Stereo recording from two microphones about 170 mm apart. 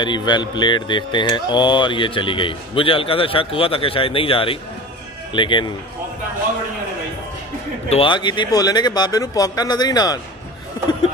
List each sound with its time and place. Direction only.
0.0 s speech: 25° left (ahead or behind)
7.9 s speech: 30° left (ahead or behind)